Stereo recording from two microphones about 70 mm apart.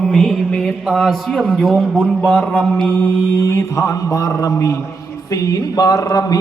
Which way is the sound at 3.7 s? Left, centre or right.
Left.